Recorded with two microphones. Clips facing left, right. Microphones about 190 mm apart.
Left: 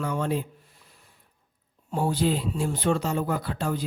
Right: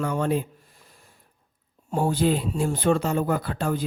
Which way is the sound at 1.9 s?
50° right (ahead or behind).